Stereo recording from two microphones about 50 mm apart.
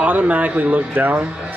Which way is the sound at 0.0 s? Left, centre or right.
Right.